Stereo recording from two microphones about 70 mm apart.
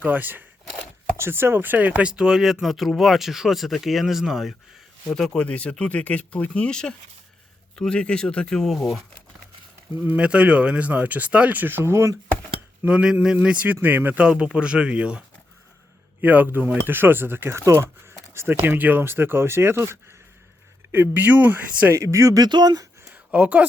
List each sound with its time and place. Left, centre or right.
0.0 s speech: right; by 8.6 s centre
8.6 s speech: centre
10.0 s speech: centre; by 12.1 s right
12.9 s speech: centre
16.2 s speech: right
18.6 s speech: right
21.9 s speech: right
22.4 s speech: right
23.1 s a sound: right